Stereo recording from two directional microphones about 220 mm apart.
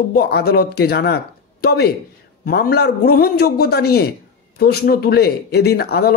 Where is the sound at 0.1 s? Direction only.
45° left (ahead or behind).